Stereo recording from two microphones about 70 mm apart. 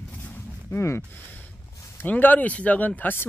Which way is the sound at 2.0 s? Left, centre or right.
Left.